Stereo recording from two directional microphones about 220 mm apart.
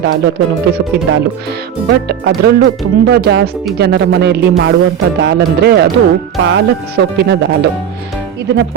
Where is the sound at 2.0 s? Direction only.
50° right (ahead or behind).